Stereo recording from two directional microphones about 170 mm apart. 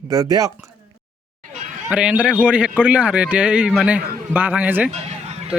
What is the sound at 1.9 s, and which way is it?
A man's voice, 5° right (ahead or behind).